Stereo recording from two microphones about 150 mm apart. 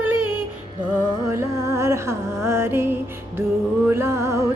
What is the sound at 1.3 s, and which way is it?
Music, 20° right (ahead or behind).